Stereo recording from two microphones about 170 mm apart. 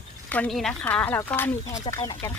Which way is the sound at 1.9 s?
30° left (ahead or behind).